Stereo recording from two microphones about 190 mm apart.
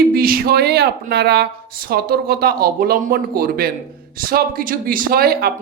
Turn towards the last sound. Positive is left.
turn(degrees=-55)  # may be behind; listen again after turning